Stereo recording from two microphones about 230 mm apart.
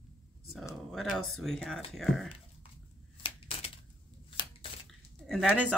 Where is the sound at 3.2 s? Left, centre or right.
Left.